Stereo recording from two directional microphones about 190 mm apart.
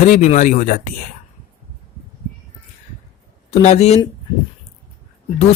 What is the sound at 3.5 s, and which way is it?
Speech, 35° left (ahead or behind).